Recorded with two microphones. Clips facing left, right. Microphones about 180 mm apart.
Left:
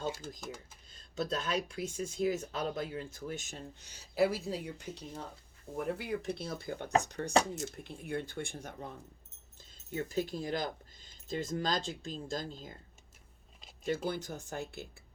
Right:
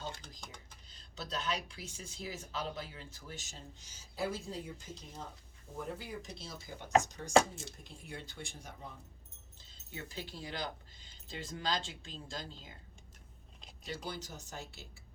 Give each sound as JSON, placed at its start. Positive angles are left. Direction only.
{"t": 0.0, "sound": "typing", "side_deg": 5}
{"t": 0.3, "sound": "speech", "side_deg": 5}
{"t": 1.1, "sound": "speech", "side_deg": 50}
{"t": 9.9, "sound": "speech", "side_deg": 45}
{"t": 13.8, "sound": "speech", "side_deg": 50}